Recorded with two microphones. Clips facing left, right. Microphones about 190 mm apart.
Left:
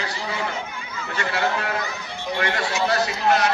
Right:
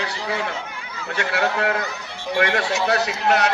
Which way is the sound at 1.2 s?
70° right (ahead or behind).